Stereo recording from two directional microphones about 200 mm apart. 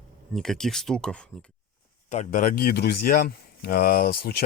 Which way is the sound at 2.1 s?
40° left (ahead or behind).